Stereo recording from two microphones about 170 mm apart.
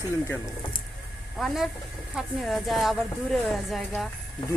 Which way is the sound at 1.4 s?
Centre (ahead or behind).